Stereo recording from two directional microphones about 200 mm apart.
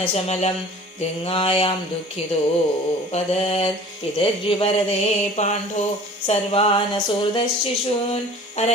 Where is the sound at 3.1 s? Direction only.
30° left (ahead or behind).